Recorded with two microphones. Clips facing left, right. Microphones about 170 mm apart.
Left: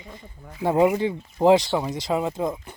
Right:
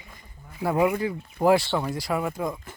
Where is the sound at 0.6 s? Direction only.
25° left (ahead or behind).